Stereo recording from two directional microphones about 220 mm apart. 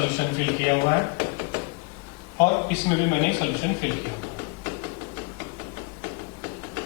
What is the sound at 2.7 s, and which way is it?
Speech, 15° left (ahead or behind).